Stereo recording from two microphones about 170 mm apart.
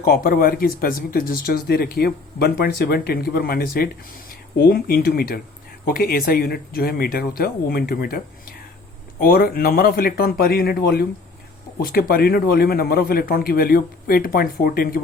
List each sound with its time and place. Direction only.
0.0 s speech: 55° left (ahead or behind)
9.2 s speech: 55° left (ahead or behind)